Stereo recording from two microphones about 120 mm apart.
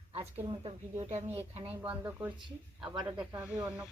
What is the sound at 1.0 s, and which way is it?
Speech, 65° right (ahead or behind).